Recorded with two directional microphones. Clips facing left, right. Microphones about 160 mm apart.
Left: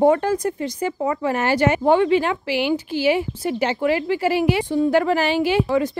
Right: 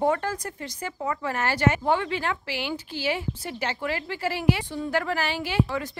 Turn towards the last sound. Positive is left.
turn(degrees=20)  # may be behind; listen again after turning